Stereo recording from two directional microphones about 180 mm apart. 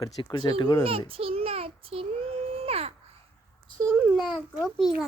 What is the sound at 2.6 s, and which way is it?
Wail, 35° right (ahead or behind).